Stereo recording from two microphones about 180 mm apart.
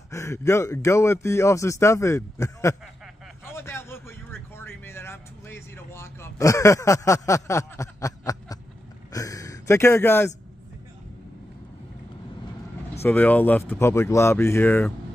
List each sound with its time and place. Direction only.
0.1 s speech: 15° left (ahead or behind)
3.4 s a sound: 15° left (ahead or behind)
13.0 s speech: 10° left (ahead or behind)